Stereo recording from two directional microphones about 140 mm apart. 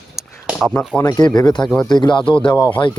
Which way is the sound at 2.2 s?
10° left (ahead or behind).